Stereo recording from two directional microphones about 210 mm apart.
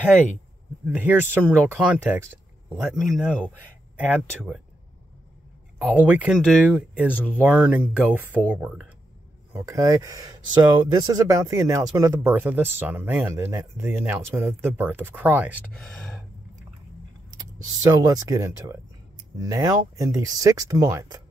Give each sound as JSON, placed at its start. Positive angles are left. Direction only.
{"t": 0.8, "sound": "speech", "side_deg": -10}
{"t": 5.8, "sound": "speech", "side_deg": -5}
{"t": 17.4, "sound": "speech", "side_deg": -15}